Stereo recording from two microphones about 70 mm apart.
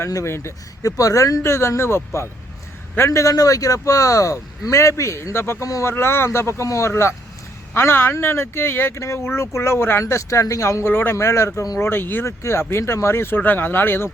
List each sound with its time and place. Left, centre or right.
0.1 s speech: left
0.8 s speech: left
3.1 s speech: left
5.6 s speech: left
5.9 s speech: left
10.0 s speech: left
10.8 s speech: left
11.8 s speech: left